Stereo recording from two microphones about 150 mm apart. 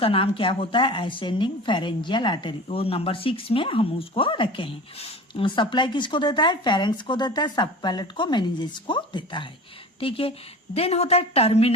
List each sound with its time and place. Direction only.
0.0 s a woman's voice: 40° left (ahead or behind)